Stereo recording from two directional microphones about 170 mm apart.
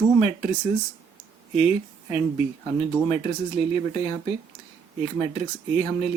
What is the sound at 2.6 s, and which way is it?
Speech, 30° left (ahead or behind).